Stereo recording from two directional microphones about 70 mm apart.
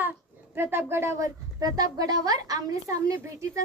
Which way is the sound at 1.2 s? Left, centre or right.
Right.